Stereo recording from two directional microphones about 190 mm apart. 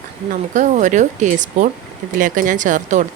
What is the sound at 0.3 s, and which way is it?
Speech, 40° right (ahead or behind).